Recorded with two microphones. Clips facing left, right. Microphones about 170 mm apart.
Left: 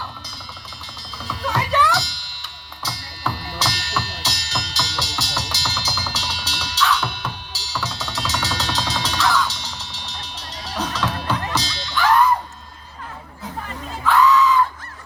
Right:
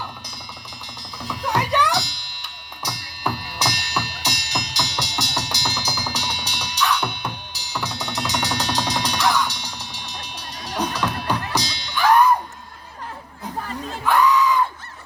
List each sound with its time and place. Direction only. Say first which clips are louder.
1.2 s music: right 1 dB; 15° right (ahead or behind)
14.0 s crowd: left 2 dB; 15° right (ahead or behind)